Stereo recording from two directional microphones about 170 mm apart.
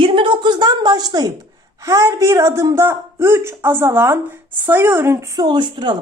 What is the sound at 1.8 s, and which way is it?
A woman's voice, 20° right (ahead or behind).